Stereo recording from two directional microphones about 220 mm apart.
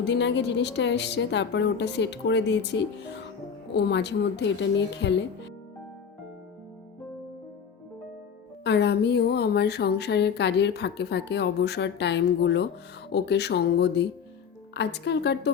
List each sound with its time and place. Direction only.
0.0 s a woman's voice: 55° left (ahead or behind)
8.6 s a woman's voice: 50° left (ahead or behind)